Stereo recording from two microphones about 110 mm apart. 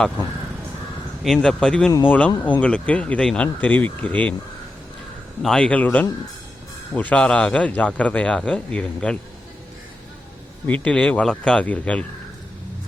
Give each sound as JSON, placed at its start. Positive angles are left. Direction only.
{"t": 1.2, "sound": "speech", "side_deg": 5}
{"t": 5.4, "sound": "speech", "side_deg": 5}
{"t": 10.7, "sound": "speech", "side_deg": 10}